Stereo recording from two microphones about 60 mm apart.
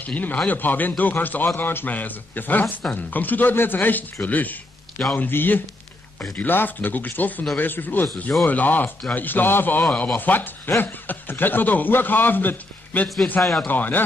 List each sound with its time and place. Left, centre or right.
0.0 s a man's voice: left
13.4 s speech: centre
13.7 s speech: left